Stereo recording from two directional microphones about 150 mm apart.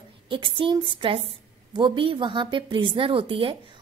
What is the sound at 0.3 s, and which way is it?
Speech, 35° right (ahead or behind).